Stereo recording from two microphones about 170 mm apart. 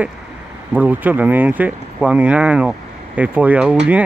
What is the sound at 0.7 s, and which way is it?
Speech, 10° right (ahead or behind).